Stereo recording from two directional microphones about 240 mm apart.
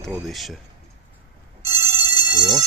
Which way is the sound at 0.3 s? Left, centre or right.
Centre.